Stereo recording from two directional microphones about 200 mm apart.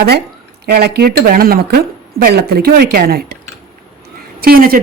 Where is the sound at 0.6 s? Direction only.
50° right (ahead or behind).